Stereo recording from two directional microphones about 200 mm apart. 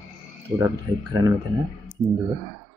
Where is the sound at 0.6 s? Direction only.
15° right (ahead or behind).